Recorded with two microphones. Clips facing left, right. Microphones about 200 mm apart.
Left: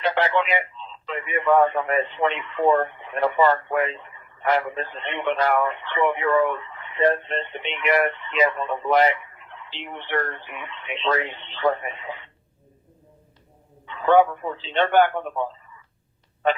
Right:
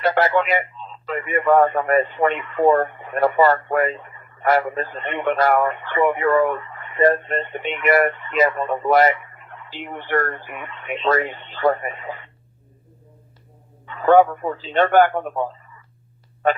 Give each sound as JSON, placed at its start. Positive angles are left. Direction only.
{"t": 0.0, "sound": "speech", "side_deg": -45}
{"t": 13.8, "sound": "speech", "side_deg": -45}